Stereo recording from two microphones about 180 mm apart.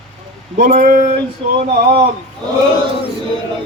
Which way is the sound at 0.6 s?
50° right (ahead or behind).